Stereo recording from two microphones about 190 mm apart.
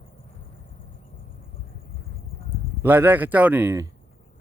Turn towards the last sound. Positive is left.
turn(degrees=-15)  # may be behind; listen again after turning